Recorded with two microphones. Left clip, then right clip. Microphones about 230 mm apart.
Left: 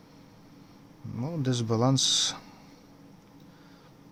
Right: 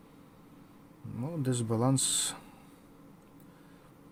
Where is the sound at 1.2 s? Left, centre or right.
Centre.